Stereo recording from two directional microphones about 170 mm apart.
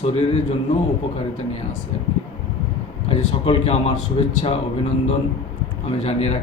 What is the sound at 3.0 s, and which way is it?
Speech, 35° left (ahead or behind).